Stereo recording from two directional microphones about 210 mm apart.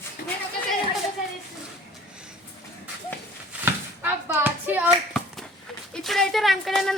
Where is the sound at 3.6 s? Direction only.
10° right (ahead or behind).